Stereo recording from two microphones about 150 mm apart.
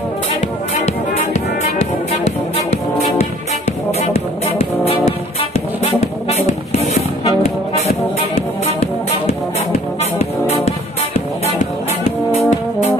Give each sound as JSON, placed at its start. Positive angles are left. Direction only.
{"t": 0.8, "sound": "music", "side_deg": 50}
{"t": 2.2, "sound": "brass instrument", "side_deg": 45}
{"t": 4.1, "sound": "music", "side_deg": 40}
{"t": 8.4, "sound": "music", "side_deg": 40}
{"t": 10.1, "sound": "music", "side_deg": 45}
{"t": 12.4, "sound": "music", "side_deg": 45}